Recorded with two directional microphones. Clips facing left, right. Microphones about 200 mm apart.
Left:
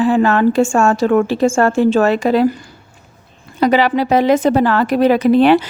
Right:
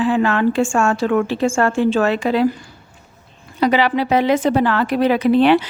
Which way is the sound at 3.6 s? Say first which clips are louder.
Left 3 dB; 45° left (ahead or behind).